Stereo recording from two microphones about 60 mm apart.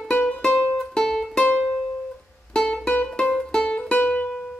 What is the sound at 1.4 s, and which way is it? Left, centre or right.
Music, centre.